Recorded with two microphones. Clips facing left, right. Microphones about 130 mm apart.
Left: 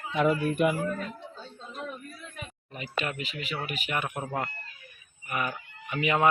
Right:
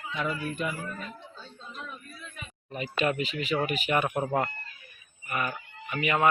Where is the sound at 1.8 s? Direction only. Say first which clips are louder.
Left 4 dB; 55° left (ahead or behind).